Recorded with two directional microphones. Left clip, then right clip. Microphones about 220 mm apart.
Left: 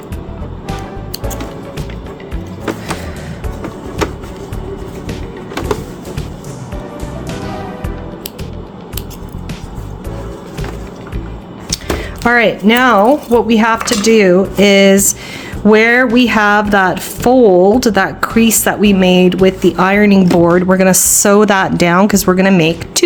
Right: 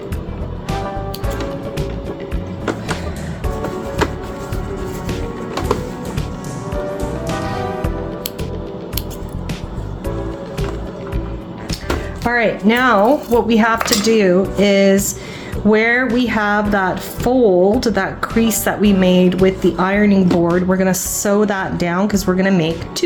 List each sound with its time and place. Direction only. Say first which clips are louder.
12.2 s a woman's voice: left 6 dB; 40° left (ahead or behind)